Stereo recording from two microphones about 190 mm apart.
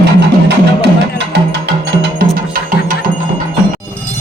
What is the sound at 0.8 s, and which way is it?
Music, 60° right (ahead or behind).